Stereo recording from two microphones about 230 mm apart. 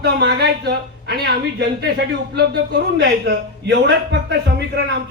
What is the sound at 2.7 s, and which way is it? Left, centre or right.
A man's voice, right.